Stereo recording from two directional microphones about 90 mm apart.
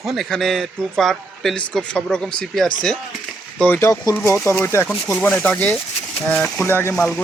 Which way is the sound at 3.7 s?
35° left (ahead or behind).